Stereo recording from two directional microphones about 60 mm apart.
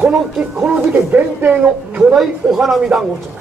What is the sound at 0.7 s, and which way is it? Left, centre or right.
Speech, right.